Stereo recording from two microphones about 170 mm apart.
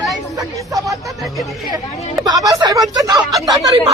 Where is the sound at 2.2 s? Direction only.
20° right (ahead or behind).